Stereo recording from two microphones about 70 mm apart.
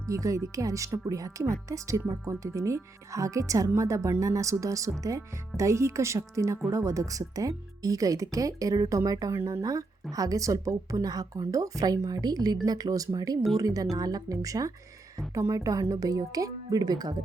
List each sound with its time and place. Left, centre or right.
0.1 s speech: right
9.3 s speech: right
9.6 s speech: right